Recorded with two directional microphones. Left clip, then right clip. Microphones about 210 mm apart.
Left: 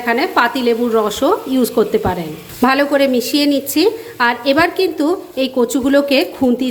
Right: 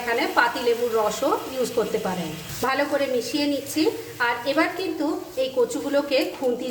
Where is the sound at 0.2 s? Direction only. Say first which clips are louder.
Left 7 dB; 40° left (ahead or behind).